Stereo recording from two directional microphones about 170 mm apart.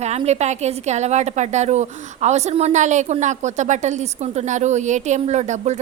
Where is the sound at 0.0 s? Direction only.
40° right (ahead or behind).